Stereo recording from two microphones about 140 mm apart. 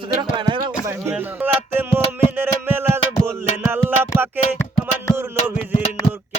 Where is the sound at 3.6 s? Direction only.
15° right (ahead or behind).